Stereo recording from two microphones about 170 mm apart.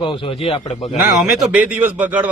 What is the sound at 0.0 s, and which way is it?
Speech, 30° left (ahead or behind).